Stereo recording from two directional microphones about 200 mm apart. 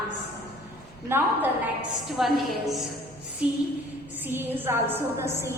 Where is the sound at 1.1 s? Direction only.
10° right (ahead or behind).